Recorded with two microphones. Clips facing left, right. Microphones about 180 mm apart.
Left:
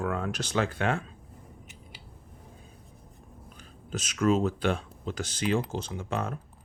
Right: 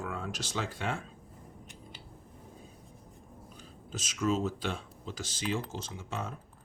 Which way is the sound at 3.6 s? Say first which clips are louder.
Left 6 dB; 60° left (ahead or behind).